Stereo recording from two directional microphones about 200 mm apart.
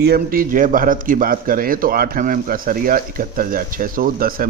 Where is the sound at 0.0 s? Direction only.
50° right (ahead or behind).